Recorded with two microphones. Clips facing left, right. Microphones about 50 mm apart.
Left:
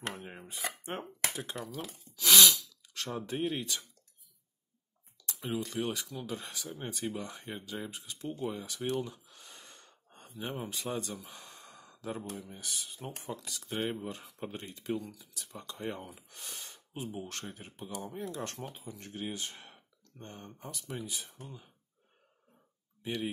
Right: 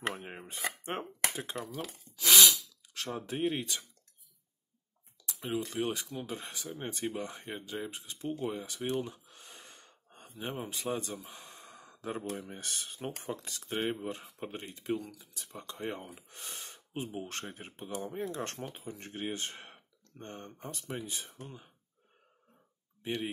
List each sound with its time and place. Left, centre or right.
0.0 s chopping: right
0.8 s speech: right
2.1 s sneeze: right
3.0 s speech: centre
5.2 s a sound: centre
5.7 s speech: right
8.5 s gasp: right
10.2 s speech: centre
11.0 s speech: right
11.3 s gasp: centre
12.4 s speech: right
13.3 s speech: right
16.5 s speech: right
23.0 s speech: right